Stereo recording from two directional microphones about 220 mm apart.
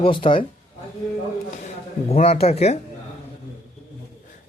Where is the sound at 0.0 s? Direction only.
25° left (ahead or behind).